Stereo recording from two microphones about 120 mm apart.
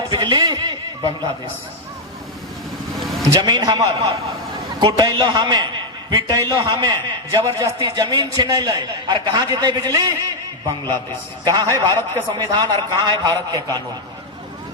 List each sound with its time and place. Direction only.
0.1 s a man's voice: 35° right (ahead or behind)
3.0 s vehicle: centre (ahead or behind)
3.4 s a man's voice: 35° right (ahead or behind)